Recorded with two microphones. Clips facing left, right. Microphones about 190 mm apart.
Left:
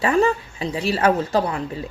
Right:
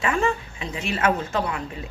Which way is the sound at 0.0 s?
35° left (ahead or behind).